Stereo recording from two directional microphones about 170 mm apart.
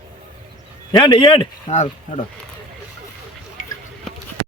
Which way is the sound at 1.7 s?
40° left (ahead or behind).